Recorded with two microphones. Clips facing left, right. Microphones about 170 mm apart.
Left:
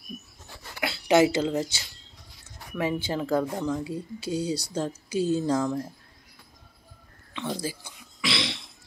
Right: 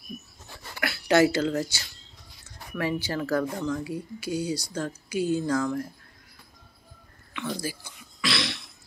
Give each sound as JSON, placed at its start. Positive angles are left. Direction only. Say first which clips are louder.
{"t": 0.7, "sound": "speech", "louder": "left 1 dB", "side_deg": 20}
{"t": 3.5, "sound": "speech", "louder": "left 1 dB", "side_deg": 10}
{"t": 3.8, "sound": "speech", "louder": "even", "side_deg": 25}
{"t": 7.3, "sound": "speech", "louder": "left 1 dB", "side_deg": 25}
{"t": 8.2, "sound": "throat clearing", "louder": "even", "side_deg": 20}